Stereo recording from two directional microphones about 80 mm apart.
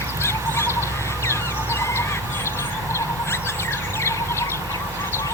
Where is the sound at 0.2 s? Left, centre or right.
Left.